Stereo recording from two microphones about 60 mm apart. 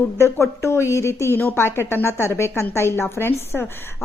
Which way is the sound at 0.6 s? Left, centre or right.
Left.